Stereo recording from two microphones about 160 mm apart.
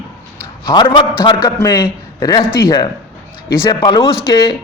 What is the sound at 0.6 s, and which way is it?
A man's voice, 30° left (ahead or behind).